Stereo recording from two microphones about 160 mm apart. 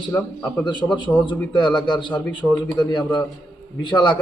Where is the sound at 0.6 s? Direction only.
30° left (ahead or behind).